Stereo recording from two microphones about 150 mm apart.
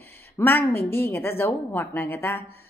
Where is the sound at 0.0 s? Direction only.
15° left (ahead or behind).